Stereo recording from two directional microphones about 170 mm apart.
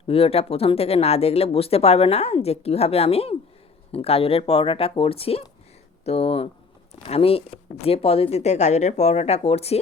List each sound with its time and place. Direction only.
0.1 s speech: 35° left (ahead or behind)